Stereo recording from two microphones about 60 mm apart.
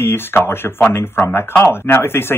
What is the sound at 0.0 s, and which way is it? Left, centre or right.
Speech, left.